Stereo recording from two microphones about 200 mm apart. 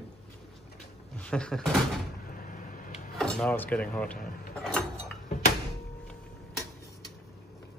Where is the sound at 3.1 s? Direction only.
5° left (ahead or behind).